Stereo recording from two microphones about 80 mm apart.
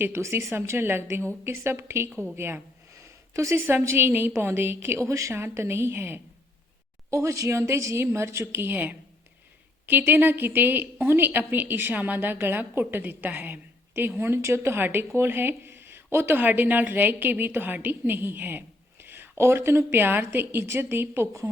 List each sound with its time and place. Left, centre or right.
0.0 s a woman's voice: right
2.9 s a woman's voice: right